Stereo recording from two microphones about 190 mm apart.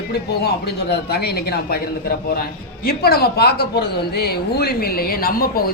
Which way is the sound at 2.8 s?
55° left (ahead or behind).